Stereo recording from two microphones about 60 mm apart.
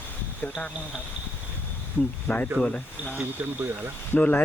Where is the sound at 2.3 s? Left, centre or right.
Left.